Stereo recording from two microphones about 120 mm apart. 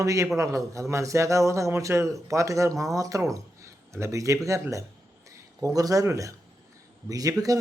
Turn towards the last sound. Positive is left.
turn(degrees=-30)  # may be behind; listen again after turning